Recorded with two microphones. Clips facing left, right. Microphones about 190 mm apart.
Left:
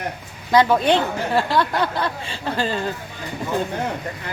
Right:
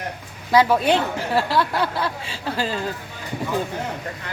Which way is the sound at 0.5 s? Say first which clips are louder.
Left 1 dB; 5° right (ahead or behind).